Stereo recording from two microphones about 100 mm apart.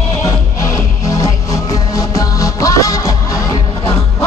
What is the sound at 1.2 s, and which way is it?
Music, 30° left (ahead or behind).